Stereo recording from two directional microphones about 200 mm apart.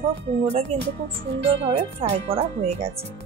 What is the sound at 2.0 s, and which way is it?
Speech, 30° right (ahead or behind).